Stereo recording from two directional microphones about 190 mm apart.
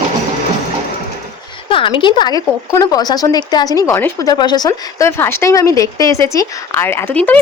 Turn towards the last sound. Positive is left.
turn(degrees=10)  # may be behind; listen again after turning